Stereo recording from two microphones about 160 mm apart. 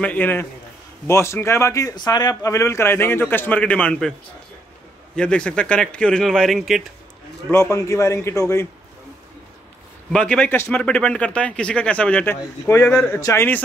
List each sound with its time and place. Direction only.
0.0 s speech: 10° left (ahead or behind)
5.1 s speech: 5° left (ahead or behind)
7.5 s speech: 15° left (ahead or behind)
10.1 s speech: 5° left (ahead or behind)